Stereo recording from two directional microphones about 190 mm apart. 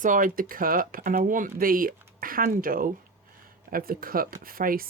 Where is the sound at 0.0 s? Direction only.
45° right (ahead or behind).